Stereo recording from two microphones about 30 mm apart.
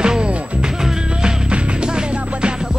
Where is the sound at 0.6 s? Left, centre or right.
Centre.